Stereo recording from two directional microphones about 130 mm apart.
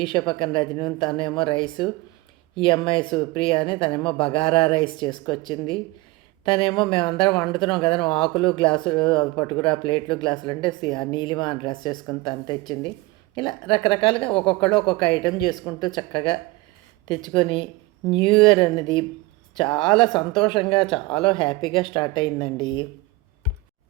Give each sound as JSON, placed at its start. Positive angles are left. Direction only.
{"t": 0.0, "sound": "a woman's voice", "side_deg": 40}